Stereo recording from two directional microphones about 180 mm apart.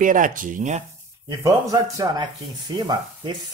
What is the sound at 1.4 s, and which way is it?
Speech, 20° right (ahead or behind).